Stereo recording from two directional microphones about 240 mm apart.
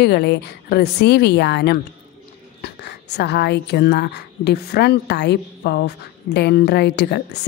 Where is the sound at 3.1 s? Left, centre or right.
Left.